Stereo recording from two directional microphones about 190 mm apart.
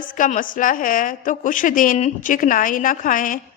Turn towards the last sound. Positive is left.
turn(degrees=45)  # may be behind; listen again after turning